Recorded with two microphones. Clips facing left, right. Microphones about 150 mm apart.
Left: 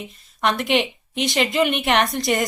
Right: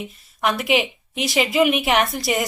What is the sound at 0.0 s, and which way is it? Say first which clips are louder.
A woman's voice: even; 5° right (ahead or behind).